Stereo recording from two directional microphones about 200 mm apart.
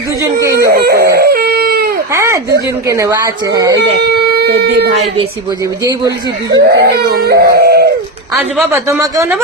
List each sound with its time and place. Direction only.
0.4 s a sound: 15° right (ahead or behind)
0.7 s howl: 50° right (ahead or behind)
1.1 s baby cry: 50° right (ahead or behind)
2.1 s a sound: 15° right (ahead or behind)
2.8 s speech: 15° right (ahead or behind)
4.0 s speech: 55° right (ahead or behind)
6.1 s speech: 55° right (ahead or behind)
8.7 s speech: 15° right (ahead or behind)